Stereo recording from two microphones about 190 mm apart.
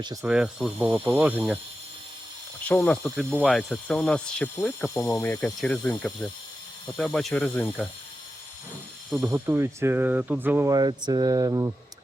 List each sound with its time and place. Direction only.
0.0 s speech: 20° right (ahead or behind)
0.3 s speech: 5° right (ahead or behind)
2.6 s speech: 10° left (ahead or behind)
9.1 s speech: 10° right (ahead or behind)